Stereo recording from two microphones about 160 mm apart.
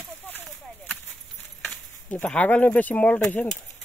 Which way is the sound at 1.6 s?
10° left (ahead or behind).